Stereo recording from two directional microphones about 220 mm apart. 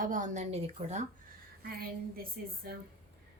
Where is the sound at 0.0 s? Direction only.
35° right (ahead or behind).